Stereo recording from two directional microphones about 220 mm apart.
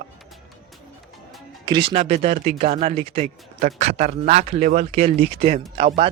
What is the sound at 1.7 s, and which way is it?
Speech, 25° right (ahead or behind).